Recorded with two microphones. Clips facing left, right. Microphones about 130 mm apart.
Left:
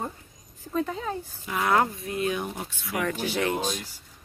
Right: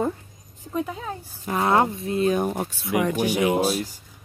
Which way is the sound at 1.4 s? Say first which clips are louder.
Right 6 dB; 40° right (ahead or behind).